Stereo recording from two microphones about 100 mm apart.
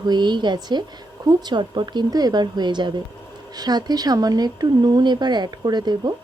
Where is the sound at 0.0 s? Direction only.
45° right (ahead or behind).